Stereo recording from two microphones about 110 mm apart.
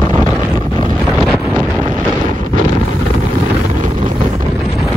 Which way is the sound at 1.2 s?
Centre (ahead or behind).